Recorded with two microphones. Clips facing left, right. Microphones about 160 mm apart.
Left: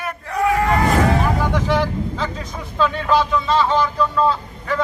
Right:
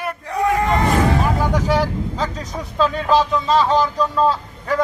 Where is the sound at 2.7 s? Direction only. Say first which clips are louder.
Right 1 dB; 35° right (ahead or behind).